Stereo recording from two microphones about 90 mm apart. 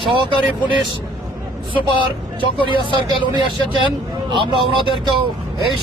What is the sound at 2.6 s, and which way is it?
Speech, 65° right (ahead or behind).